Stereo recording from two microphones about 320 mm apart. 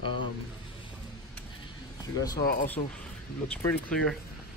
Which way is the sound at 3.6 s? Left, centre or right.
Centre.